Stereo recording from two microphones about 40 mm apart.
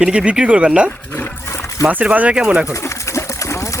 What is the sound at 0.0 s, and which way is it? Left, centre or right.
Speech, right.